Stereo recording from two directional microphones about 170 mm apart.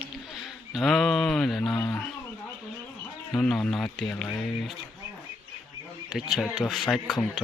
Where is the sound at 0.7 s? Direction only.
Centre (ahead or behind).